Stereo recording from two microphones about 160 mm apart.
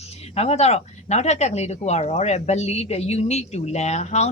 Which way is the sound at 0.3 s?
40° left (ahead or behind).